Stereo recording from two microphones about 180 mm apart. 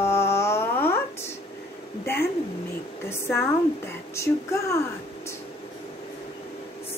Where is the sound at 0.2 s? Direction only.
15° left (ahead or behind).